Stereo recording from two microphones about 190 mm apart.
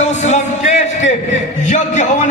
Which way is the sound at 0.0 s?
40° left (ahead or behind).